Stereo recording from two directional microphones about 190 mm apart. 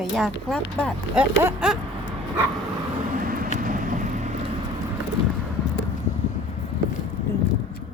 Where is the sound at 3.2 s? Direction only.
50° right (ahead or behind).